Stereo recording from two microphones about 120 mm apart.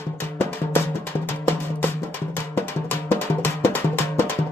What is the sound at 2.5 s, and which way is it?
Music, 15° left (ahead or behind).